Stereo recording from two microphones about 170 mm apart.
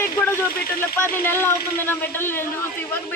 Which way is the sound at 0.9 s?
10° left (ahead or behind).